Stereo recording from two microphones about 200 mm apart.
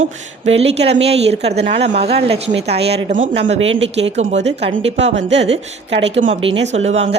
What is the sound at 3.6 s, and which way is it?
Speech, 75° right (ahead or behind).